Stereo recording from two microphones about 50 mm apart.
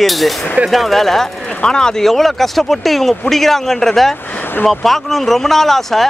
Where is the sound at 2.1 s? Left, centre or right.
Centre.